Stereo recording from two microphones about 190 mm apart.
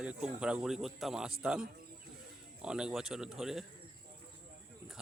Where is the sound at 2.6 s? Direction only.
5° right (ahead or behind).